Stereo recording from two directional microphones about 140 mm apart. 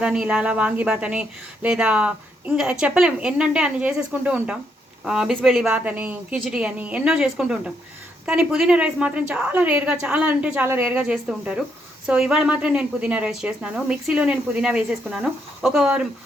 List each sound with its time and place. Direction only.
0.0 s speech: 5° right (ahead or behind)